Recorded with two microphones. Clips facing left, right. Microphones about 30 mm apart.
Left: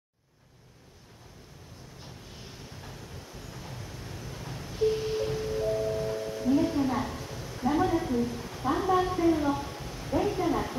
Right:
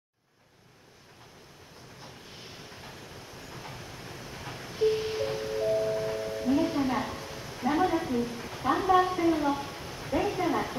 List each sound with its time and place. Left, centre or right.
3.5 s music: right
7.0 s a sound: right
8.2 s a woman's voice: right
9.2 s a woman's voice: centre